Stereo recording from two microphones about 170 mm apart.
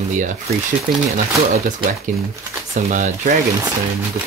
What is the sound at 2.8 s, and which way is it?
Speech, 40° right (ahead or behind).